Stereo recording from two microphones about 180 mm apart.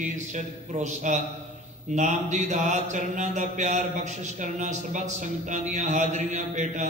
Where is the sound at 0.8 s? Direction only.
40° right (ahead or behind).